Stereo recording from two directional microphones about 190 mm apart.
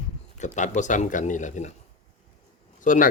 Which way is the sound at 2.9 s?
45° left (ahead or behind).